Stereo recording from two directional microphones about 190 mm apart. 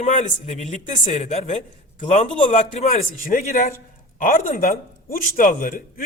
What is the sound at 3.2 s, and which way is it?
Speech, 50° left (ahead or behind).